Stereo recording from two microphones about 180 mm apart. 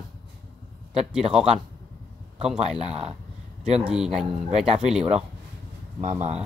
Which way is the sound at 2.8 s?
35° right (ahead or behind).